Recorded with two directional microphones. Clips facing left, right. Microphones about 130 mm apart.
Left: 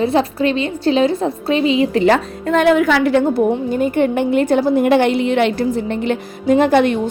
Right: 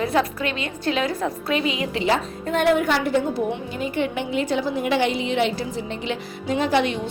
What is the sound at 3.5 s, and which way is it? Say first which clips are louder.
A woman's voice: left 10 dB; 45° left (ahead or behind).